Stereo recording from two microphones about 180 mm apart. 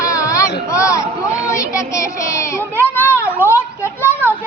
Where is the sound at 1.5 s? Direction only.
15° left (ahead or behind).